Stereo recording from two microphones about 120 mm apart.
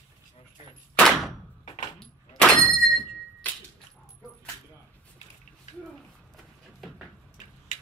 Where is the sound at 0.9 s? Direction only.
5° left (ahead or behind).